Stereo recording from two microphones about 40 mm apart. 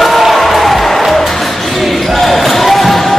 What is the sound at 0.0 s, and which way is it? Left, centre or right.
Music, centre.